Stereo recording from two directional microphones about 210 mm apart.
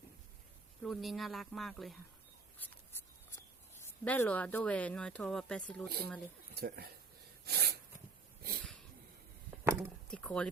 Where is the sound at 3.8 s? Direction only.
10° left (ahead or behind).